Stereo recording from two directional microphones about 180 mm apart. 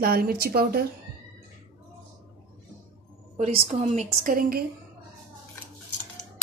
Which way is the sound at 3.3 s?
40° right (ahead or behind).